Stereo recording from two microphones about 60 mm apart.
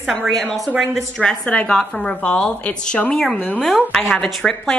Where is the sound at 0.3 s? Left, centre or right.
Centre.